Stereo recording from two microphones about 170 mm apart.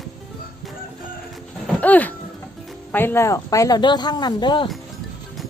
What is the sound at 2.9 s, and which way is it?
Speech, 10° left (ahead or behind).